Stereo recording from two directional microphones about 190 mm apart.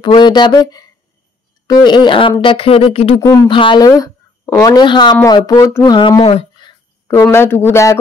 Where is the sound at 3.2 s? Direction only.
15° left (ahead or behind).